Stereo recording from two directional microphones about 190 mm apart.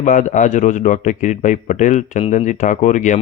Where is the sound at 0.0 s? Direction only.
40° left (ahead or behind).